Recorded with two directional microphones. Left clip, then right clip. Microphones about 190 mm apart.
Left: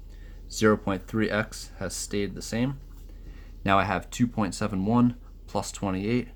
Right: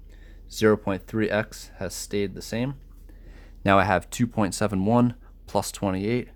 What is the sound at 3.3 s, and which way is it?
Speech, 50° right (ahead or behind).